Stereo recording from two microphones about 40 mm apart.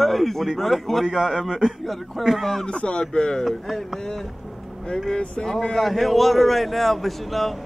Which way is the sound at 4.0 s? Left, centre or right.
Centre.